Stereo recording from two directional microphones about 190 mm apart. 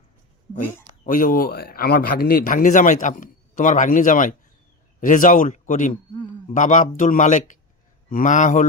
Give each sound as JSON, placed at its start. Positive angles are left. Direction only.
{"t": 1.0, "sound": "a man's voice", "side_deg": 45}